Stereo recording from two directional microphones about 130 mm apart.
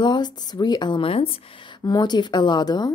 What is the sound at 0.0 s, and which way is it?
A woman's voice, 35° left (ahead or behind).